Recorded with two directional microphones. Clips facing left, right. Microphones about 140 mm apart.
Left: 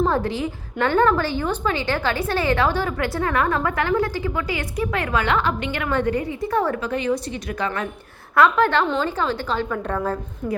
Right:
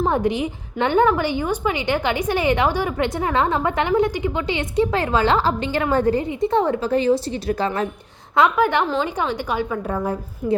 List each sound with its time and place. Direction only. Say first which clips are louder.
0.1 s a woman's voice: right 2 dB; 20° right (ahead or behind); by 6.2 s 35° right (ahead or behind)
6.2 s a woman's voice: right 3 dB; 20° right (ahead or behind)
8.4 s a woman's voice: even; 15° right (ahead or behind)